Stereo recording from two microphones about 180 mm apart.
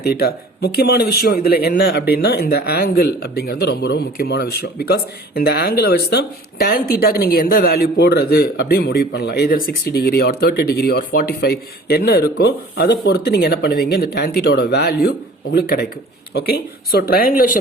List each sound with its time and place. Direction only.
0.0 s a man's voice: 60° left (ahead or behind)